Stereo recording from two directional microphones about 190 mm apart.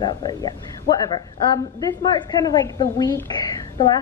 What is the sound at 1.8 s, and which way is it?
A woman's voice, 20° left (ahead or behind).